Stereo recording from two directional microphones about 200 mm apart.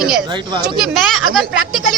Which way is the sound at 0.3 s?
25° right (ahead or behind).